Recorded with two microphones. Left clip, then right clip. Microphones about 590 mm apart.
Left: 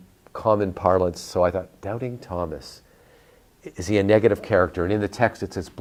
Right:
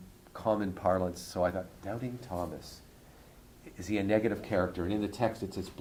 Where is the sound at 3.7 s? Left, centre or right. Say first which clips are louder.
Left 11 dB; left.